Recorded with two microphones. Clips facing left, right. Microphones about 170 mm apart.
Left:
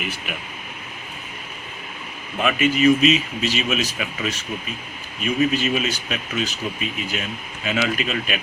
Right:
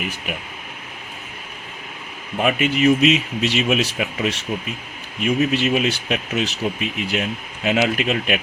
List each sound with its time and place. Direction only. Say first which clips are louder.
2.4 s speech: even; 55° right (ahead or behind)